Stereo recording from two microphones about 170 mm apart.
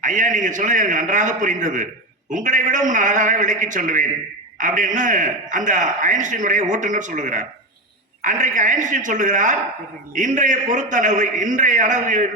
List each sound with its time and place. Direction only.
0.0 s a man's voice: 50° right (ahead or behind)